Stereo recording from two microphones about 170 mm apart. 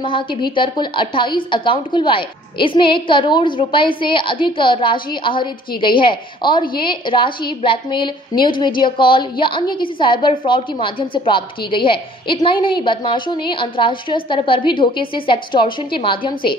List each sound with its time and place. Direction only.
0.0 s a woman's voice: 30° left (ahead or behind)